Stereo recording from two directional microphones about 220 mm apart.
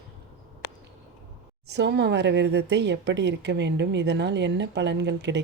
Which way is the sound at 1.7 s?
50° right (ahead or behind).